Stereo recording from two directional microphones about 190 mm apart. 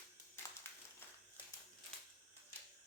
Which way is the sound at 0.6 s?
15° left (ahead or behind).